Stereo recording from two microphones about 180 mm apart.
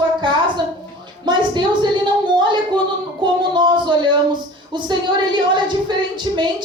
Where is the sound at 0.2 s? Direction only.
25° right (ahead or behind).